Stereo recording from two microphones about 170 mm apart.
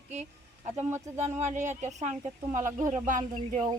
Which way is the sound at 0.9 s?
15° right (ahead or behind).